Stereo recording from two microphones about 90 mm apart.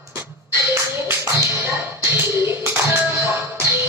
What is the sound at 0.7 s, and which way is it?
Music, 30° right (ahead or behind).